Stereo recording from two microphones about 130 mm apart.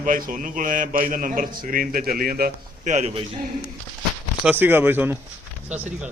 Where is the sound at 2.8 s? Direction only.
70° right (ahead or behind).